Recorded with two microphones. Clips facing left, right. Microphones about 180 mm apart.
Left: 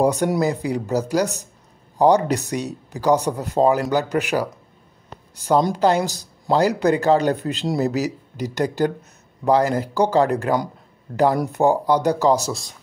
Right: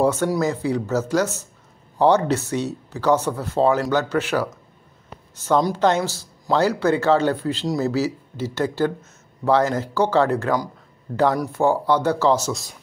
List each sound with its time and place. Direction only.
0.0 s speech: 15° left (ahead or behind)